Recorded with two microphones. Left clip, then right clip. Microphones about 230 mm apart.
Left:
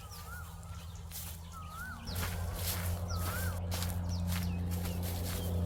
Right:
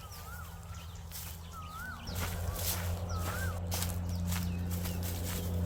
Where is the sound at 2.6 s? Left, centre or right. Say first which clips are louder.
Right 2 dB; centre.